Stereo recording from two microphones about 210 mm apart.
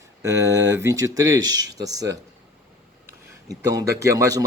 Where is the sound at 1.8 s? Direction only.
15° right (ahead or behind).